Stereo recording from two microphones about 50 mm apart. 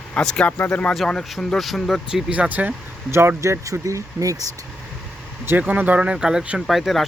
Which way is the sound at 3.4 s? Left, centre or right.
Right.